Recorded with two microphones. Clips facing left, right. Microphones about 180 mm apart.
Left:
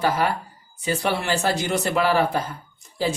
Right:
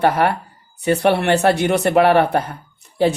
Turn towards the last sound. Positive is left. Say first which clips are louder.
# right 8 dB
turn(degrees=-65)  # may be behind; listen again after turning